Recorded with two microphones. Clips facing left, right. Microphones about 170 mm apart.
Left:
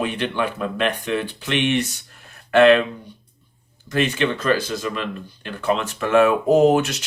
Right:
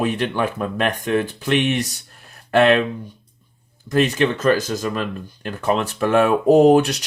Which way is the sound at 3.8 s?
35° right (ahead or behind).